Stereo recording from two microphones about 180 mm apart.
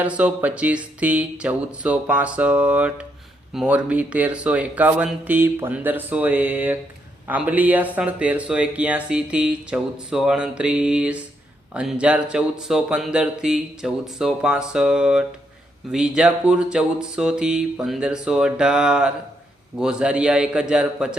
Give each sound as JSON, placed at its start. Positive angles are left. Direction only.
{"t": 0.0, "sound": "speech", "side_deg": -5}